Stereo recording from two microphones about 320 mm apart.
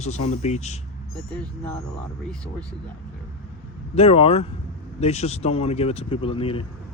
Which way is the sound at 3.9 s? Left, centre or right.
Centre.